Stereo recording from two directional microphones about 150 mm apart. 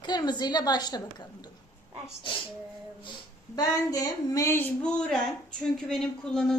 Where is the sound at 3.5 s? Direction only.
25° left (ahead or behind).